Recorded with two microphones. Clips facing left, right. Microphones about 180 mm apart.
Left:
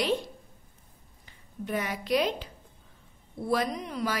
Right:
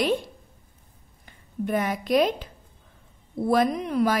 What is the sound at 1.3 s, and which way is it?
A woman's voice, 50° right (ahead or behind).